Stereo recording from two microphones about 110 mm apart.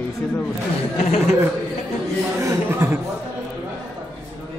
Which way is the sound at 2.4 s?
25° right (ahead or behind).